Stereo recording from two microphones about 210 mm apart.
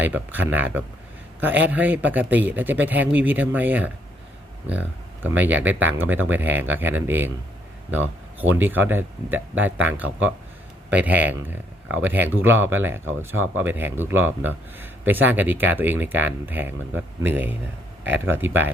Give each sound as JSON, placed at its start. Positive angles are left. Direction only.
{"t": 0.0, "sound": "speech", "side_deg": -10}
{"t": 7.9, "sound": "a sound", "side_deg": -10}
{"t": 8.6, "sound": "speech", "side_deg": -10}
{"t": 13.1, "sound": "speech", "side_deg": -70}
{"t": 13.6, "sound": "speech", "side_deg": -10}
{"t": 18.0, "sound": "speech", "side_deg": -60}